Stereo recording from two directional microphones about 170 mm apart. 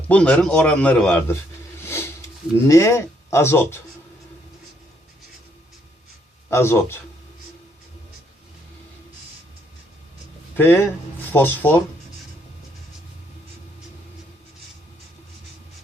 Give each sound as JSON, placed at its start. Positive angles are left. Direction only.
{"t": 0.1, "sound": "a man's voice", "side_deg": 10}
{"t": 1.8, "sound": "a sound", "side_deg": 15}
{"t": 2.6, "sound": "a man's voice", "side_deg": 15}
{"t": 6.5, "sound": "a man's voice", "side_deg": 15}
{"t": 10.6, "sound": "a man's voice", "side_deg": 10}